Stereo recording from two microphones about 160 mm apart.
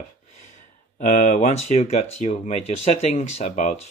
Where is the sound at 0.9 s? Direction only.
50° left (ahead or behind).